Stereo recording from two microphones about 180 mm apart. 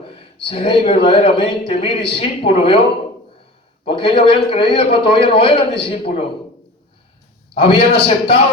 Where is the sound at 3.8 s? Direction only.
30° left (ahead or behind).